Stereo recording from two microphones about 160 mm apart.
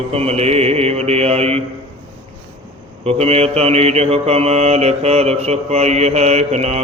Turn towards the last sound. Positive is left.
turn(degrees=-45)  # may be behind; listen again after turning